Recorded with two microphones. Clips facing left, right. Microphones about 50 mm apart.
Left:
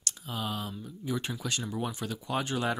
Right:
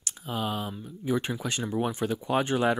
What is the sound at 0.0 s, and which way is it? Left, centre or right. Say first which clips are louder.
Speech: right 4 dB; right.